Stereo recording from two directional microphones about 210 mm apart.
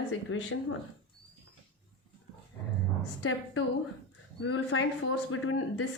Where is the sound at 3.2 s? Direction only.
70° left (ahead or behind).